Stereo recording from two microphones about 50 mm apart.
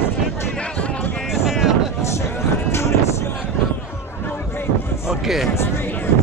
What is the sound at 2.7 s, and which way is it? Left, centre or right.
Music, left.